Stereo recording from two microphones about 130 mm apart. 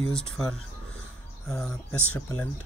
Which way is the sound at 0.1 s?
5° left (ahead or behind).